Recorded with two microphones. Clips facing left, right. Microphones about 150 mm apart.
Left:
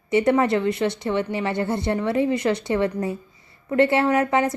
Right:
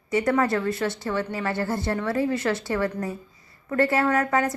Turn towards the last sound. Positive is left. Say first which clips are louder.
# left 3 dB
turn(degrees=25)  # may be behind; listen again after turning